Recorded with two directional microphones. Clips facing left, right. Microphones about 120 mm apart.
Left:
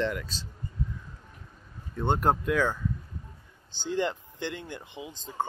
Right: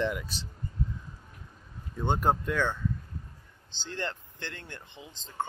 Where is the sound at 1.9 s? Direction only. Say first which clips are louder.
Left 2 dB; centre (ahead or behind).